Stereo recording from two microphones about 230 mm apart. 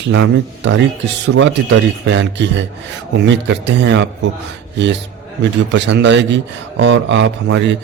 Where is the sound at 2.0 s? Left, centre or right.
Right.